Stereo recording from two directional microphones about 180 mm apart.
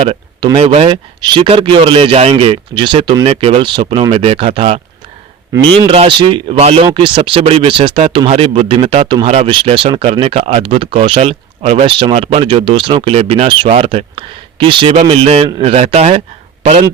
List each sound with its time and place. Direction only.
0.0 s speech: 30° right (ahead or behind)